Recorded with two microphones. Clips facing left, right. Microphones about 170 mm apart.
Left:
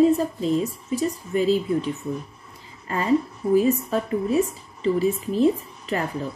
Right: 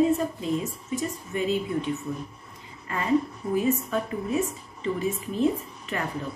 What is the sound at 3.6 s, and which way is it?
A woman's voice, 35° left (ahead or behind).